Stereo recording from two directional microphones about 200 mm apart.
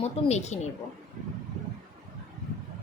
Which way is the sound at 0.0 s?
35° left (ahead or behind).